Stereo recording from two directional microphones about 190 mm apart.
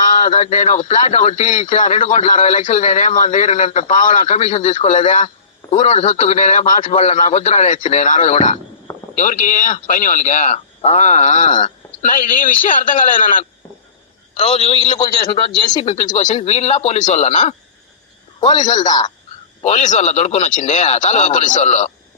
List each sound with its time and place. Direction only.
0.0 s a man's voice: 45° left (ahead or behind)
14.3 s speech: 30° left (ahead or behind)
18.7 s speech: 40° left (ahead or behind)